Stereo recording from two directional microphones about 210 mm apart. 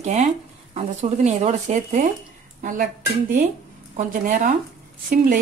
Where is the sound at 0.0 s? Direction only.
35° right (ahead or behind).